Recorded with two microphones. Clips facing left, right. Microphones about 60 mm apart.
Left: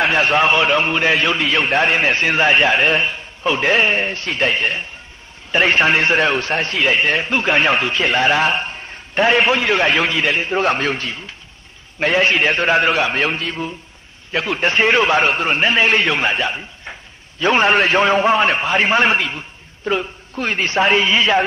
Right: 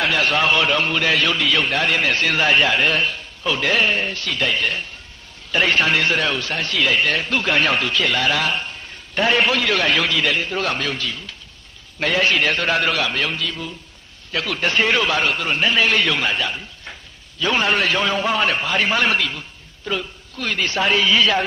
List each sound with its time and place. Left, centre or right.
0.0 s a man's voice: left